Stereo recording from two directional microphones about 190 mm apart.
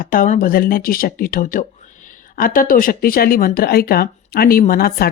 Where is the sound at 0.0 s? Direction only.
45° left (ahead or behind).